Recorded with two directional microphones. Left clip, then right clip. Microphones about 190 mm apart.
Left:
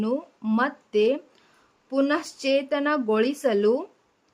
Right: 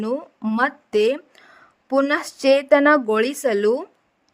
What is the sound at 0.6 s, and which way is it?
A woman's voice, 35° right (ahead or behind).